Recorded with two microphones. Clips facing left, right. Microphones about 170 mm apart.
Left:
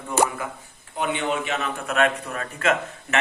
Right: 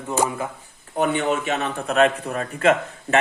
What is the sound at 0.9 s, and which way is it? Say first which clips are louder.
Speech: right 4 dB; 45° right (ahead or behind).